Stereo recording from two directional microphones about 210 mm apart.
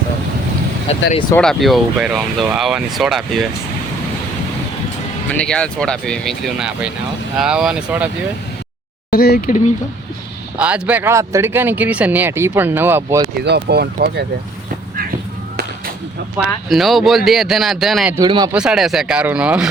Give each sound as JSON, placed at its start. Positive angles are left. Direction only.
{"t": 1.4, "sound": "speech", "side_deg": 0}
{"t": 5.3, "sound": "speech", "side_deg": 5}
{"t": 9.1, "sound": "speech", "side_deg": 45}
{"t": 10.6, "sound": "speech", "side_deg": -5}
{"t": 13.4, "sound": "speech", "side_deg": -50}
{"t": 16.6, "sound": "speech", "side_deg": 0}
{"t": 18.2, "sound": "speech", "side_deg": -20}
{"t": 18.5, "sound": "speech", "side_deg": -5}